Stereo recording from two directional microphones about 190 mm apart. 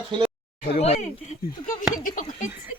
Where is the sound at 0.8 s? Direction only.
35° left (ahead or behind).